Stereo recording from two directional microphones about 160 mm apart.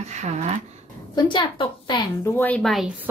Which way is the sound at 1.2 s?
30° left (ahead or behind).